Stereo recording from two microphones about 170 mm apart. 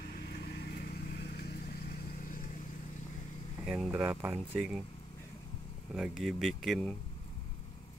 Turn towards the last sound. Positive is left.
turn(degrees=0)  # may be behind; listen again after turning